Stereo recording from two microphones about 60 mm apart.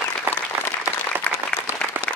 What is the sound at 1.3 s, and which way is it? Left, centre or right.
Applause, centre.